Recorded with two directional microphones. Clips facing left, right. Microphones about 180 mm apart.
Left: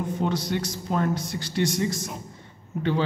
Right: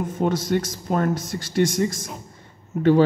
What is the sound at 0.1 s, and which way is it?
Speech, 50° right (ahead or behind).